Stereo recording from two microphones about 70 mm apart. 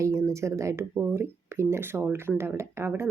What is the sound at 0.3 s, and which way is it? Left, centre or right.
Speech, right.